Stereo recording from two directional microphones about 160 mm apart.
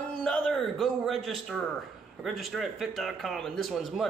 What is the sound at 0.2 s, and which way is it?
A man's voice, 5° left (ahead or behind).